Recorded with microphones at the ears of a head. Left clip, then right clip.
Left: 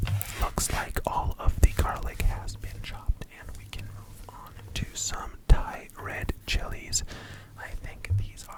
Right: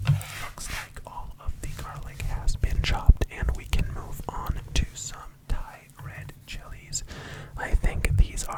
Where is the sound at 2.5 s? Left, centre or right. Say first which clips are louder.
Right 11 dB; right.